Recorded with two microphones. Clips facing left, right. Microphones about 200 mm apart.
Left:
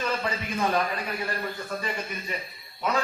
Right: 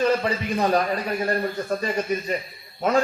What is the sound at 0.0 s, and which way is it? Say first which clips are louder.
Speech: right 8 dB; 35° right (ahead or behind).